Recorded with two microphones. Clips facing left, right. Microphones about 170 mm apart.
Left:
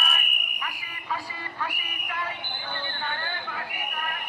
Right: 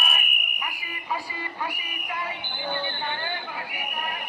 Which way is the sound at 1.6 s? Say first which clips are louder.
Even; 15° right (ahead or behind).